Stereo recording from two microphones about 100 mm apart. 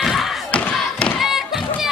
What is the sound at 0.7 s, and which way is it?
Thump, centre (ahead or behind).